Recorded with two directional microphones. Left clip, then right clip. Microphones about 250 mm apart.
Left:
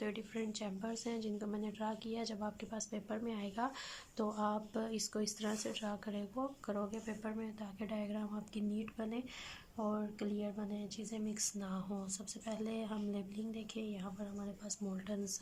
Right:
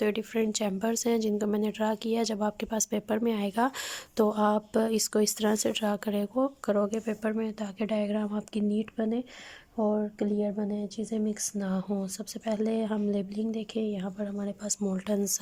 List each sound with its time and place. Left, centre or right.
0.0 s speech: right